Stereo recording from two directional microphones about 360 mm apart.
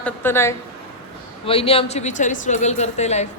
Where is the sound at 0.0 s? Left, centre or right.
Centre.